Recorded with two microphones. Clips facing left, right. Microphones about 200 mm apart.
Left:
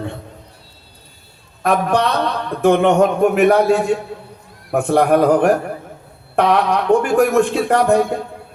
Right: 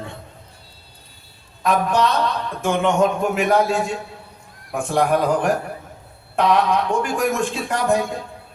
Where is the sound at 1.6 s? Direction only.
60° left (ahead or behind).